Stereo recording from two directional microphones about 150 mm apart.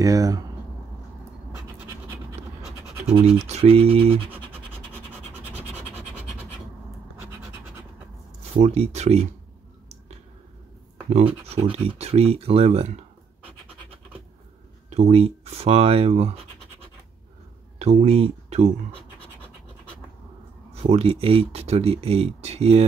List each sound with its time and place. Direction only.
0.0 s speech: 25° right (ahead or behind)
3.3 s speech: 45° right (ahead or behind)
8.5 s speech: 40° right (ahead or behind)
11.1 s speech: 45° right (ahead or behind)
14.9 s speech: 45° right (ahead or behind)
17.7 s speech: 45° right (ahead or behind)
20.9 s speech: 40° right (ahead or behind)